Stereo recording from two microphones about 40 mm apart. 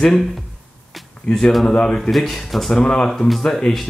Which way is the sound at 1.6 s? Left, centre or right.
Left.